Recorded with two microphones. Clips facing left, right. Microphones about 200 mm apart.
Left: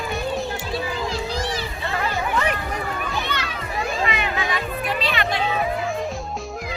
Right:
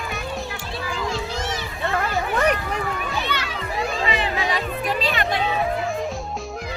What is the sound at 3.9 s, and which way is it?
Music, 30° right (ahead or behind).